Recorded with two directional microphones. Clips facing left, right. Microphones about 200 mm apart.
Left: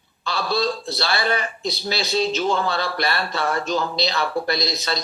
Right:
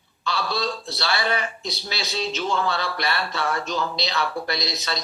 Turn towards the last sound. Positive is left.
turn(degrees=35)  # may be behind; listen again after turning